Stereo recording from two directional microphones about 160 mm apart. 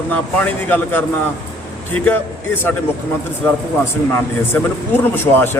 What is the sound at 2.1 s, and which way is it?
Speech, 10° left (ahead or behind).